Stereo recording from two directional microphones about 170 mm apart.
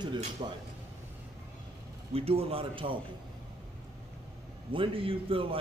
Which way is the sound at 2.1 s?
35° right (ahead or behind).